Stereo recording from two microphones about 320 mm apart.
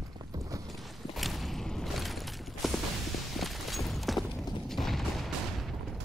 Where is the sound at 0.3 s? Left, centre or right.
Centre.